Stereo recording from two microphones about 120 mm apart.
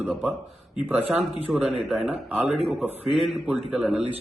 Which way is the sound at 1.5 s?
5° right (ahead or behind).